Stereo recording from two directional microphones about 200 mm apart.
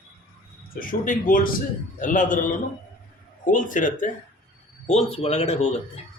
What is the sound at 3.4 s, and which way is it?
Speech, 40° left (ahead or behind).